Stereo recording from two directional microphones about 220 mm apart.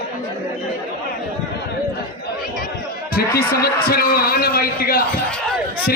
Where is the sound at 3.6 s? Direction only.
45° left (ahead or behind).